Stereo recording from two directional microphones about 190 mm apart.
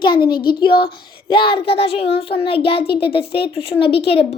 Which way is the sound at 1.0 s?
25° left (ahead or behind).